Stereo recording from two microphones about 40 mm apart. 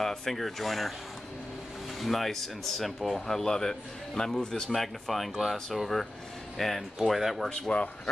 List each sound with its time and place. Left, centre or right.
0.0 s speech: centre
2.0 s speech: centre
7.0 s speech: centre
7.7 s speech: left